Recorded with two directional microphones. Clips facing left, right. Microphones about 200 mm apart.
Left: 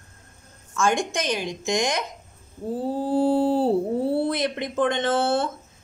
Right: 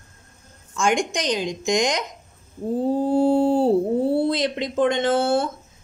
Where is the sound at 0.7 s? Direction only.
15° right (ahead or behind).